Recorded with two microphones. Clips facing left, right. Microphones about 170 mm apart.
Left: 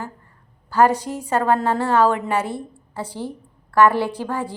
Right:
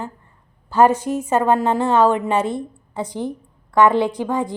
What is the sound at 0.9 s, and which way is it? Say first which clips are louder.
Speech: right 3 dB; 15° left (ahead or behind).